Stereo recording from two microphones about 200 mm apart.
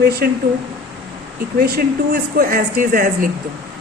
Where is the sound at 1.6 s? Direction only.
50° right (ahead or behind).